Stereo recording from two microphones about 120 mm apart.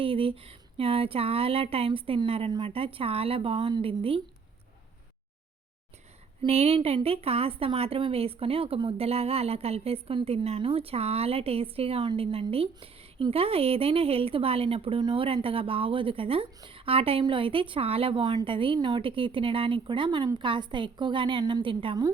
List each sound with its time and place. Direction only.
0.0 s speech: 50° right (ahead or behind)
6.4 s a woman's voice: 55° right (ahead or behind)